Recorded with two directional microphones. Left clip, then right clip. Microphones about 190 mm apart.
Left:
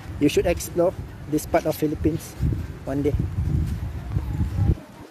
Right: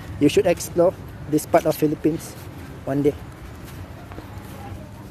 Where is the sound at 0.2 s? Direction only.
10° right (ahead or behind).